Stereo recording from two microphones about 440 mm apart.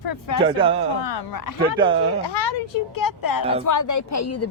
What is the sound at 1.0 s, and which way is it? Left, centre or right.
Speech, left.